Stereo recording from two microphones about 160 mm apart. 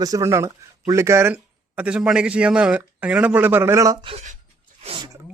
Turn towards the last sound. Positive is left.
turn(degrees=-35)  # may be behind; listen again after turning